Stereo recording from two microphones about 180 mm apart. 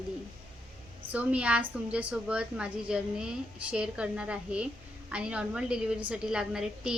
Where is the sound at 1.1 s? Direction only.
5° right (ahead or behind).